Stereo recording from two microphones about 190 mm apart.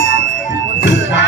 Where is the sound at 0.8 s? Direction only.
70° left (ahead or behind).